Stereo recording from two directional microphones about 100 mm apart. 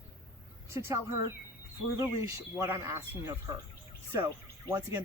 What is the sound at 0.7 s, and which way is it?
Speech, 25° right (ahead or behind).